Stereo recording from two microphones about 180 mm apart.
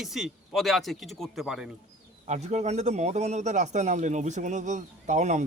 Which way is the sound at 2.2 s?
40° right (ahead or behind).